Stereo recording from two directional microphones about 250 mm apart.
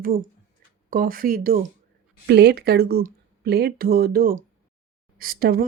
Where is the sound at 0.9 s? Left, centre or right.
Right.